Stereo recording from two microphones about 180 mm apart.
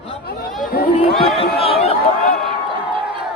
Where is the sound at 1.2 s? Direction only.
30° left (ahead or behind).